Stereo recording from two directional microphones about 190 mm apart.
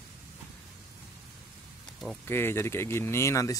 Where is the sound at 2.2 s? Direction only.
10° left (ahead or behind).